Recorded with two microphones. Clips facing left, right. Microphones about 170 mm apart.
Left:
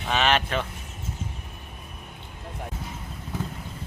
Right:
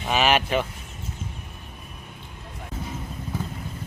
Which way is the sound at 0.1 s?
10° right (ahead or behind).